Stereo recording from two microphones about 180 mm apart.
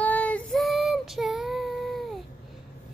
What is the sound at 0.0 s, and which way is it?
Child singing, 10° left (ahead or behind).